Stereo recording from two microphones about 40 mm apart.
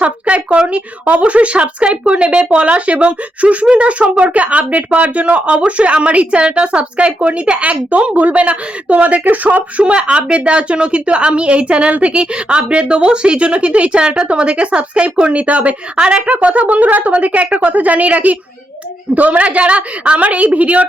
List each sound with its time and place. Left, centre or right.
0.0 s a woman's voice: right
9.8 s a woman's voice: right
16.0 s a woman's voice: right
16.2 s speech: right